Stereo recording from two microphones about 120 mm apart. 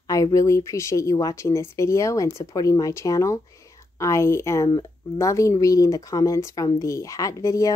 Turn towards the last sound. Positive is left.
turn(degrees=25)  # may be behind; listen again after turning